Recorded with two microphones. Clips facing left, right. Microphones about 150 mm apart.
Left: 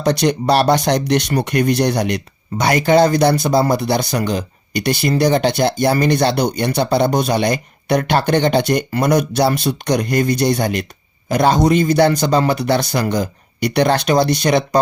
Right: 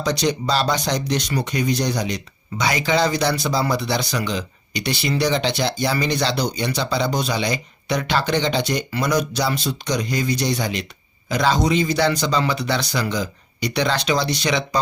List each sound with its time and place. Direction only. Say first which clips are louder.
0.0 s a man's voice: left 5 dB; 60° left (ahead or behind)